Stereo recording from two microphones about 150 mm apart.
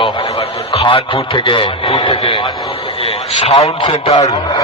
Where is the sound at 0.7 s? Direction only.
35° left (ahead or behind).